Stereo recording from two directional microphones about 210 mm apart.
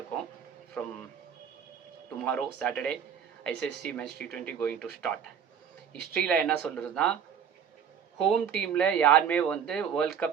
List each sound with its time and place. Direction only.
2.1 s speech: 5° left (ahead or behind)
6.1 s speech: 5° left (ahead or behind)
8.2 s speech: 5° left (ahead or behind)